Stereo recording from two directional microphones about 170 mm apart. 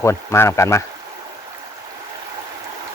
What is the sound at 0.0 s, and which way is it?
Speech, 15° left (ahead or behind).